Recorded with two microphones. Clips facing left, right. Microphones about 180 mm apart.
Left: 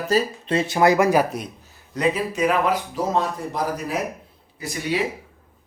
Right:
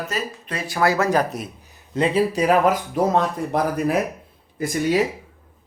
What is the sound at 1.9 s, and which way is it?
Speech, 30° right (ahead or behind).